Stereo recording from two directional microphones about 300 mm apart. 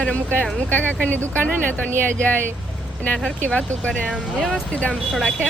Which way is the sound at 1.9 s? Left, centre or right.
Centre.